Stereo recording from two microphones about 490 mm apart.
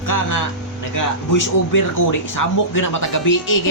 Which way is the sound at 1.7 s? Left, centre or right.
Left.